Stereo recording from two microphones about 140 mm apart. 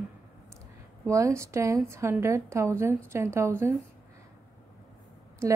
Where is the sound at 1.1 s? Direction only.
20° right (ahead or behind).